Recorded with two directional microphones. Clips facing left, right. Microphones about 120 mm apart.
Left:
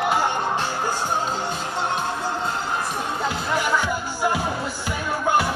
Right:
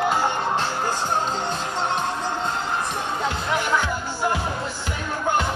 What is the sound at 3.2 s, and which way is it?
Music, 10° left (ahead or behind).